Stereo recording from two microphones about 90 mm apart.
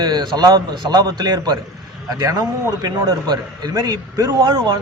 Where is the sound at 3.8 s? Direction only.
35° right (ahead or behind).